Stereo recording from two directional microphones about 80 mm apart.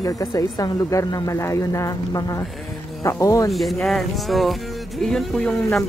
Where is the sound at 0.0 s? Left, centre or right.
Left.